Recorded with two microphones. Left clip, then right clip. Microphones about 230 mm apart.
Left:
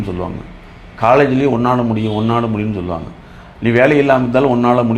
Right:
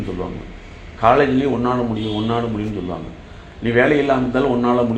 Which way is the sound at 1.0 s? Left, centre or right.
Left.